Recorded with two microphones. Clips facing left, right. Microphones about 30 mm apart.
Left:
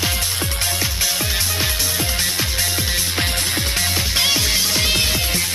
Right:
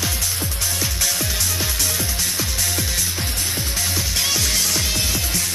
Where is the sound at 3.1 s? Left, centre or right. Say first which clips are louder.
Left 4 dB; left.